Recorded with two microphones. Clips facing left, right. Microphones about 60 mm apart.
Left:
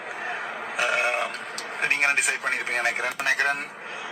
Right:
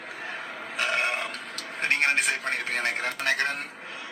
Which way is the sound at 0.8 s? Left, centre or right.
Centre.